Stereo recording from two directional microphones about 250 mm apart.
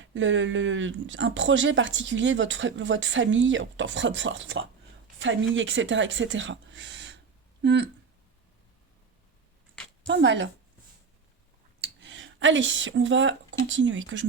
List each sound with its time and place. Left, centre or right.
0.0 s speech: right
10.1 s speech: right
11.9 s speech: right